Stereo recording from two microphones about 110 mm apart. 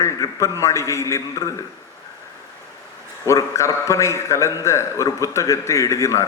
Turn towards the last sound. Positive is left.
turn(degrees=30)  # may be behind; listen again after turning